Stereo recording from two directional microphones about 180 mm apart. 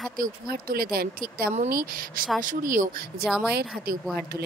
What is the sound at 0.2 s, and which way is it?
Speech, 55° right (ahead or behind).